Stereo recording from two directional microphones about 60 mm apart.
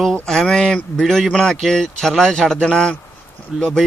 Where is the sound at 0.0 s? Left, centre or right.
Centre.